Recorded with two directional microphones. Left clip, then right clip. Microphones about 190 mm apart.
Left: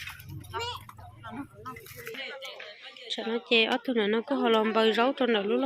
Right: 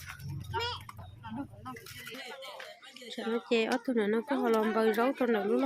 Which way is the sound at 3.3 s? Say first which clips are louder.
Left 5 dB; 10° right (ahead or behind).